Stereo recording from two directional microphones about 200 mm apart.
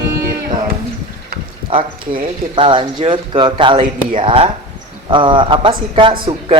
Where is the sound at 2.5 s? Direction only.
25° right (ahead or behind).